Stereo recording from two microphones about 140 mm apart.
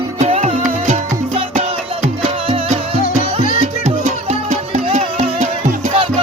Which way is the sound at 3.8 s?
55° right (ahead or behind).